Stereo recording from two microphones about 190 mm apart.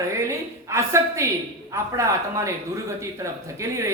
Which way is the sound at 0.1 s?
15° right (ahead or behind).